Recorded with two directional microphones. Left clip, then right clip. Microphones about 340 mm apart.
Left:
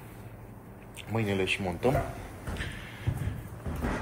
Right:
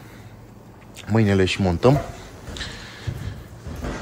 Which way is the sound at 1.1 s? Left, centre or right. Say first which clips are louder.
Right 10 dB; right.